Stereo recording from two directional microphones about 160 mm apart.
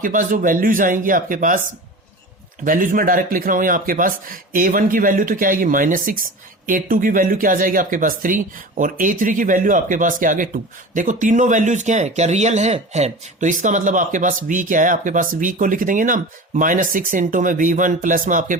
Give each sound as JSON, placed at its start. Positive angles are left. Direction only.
{"t": 0.0, "sound": "speech", "side_deg": -55}
{"t": 2.6, "sound": "speech", "side_deg": -55}